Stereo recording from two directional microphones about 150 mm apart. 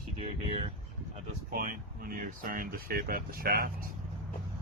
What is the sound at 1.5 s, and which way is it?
Speech, 70° right (ahead or behind).